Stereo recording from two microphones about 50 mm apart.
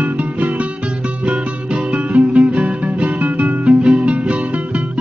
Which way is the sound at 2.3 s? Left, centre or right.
Centre.